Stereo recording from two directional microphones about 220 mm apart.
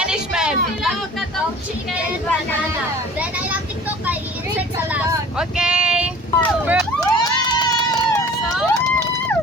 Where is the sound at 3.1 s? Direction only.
5° right (ahead or behind).